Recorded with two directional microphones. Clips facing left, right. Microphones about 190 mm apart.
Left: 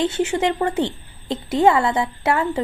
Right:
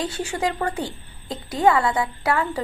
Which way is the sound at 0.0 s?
25° left (ahead or behind).